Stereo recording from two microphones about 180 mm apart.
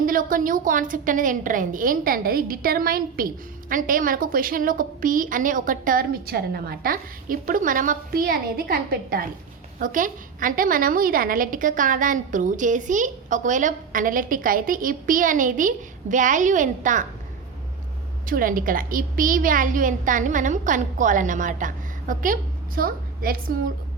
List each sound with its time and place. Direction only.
0.0 s a woman's voice: 50° right (ahead or behind)
18.3 s a woman's voice: 50° right (ahead or behind)